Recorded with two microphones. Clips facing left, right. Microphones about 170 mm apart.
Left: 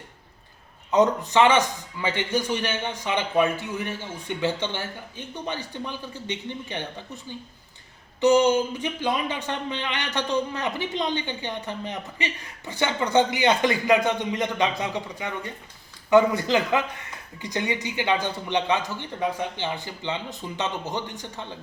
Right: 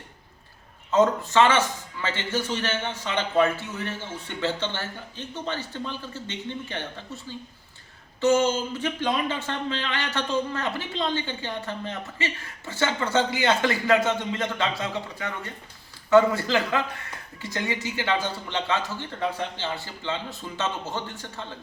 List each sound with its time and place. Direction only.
0.9 s speech: 15° left (ahead or behind)